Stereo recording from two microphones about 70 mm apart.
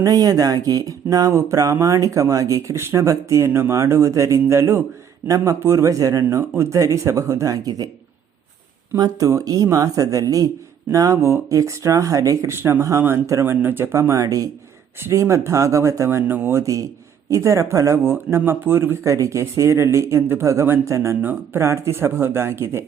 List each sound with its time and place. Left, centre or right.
0.0 s speech: right
9.0 s speech: right
13.4 s speech: right
13.9 s speech: right
16.6 s speech: right
18.0 s speech: right
19.0 s speech: right
21.2 s speech: right